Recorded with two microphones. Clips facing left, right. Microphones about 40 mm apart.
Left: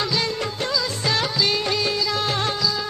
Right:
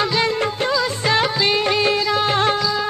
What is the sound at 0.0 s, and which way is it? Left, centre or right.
Music of bollywood, right.